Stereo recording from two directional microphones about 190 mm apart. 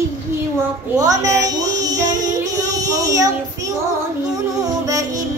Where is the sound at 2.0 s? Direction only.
20° right (ahead or behind).